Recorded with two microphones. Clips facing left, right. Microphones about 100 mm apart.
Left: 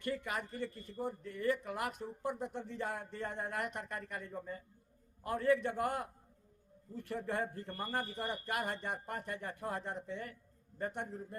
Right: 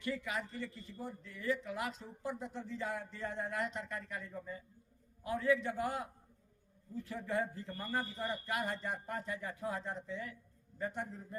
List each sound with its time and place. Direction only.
0.0 s speech: 50° left (ahead or behind)